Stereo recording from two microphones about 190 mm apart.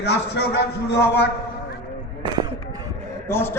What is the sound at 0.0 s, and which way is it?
Speech, 60° left (ahead or behind).